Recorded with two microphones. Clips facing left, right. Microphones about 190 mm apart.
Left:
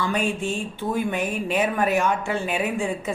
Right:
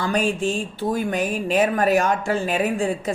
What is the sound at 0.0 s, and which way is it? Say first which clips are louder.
Speech: right 3 dB; 40° right (ahead or behind).